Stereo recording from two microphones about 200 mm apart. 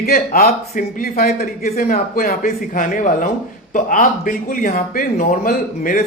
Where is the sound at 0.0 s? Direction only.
50° left (ahead or behind).